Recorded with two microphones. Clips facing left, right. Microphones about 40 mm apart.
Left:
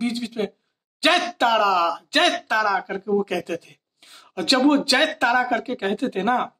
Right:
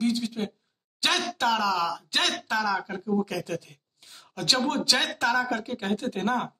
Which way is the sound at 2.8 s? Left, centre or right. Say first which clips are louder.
Left 5 dB; centre.